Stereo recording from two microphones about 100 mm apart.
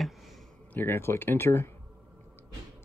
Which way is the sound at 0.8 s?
25° left (ahead or behind).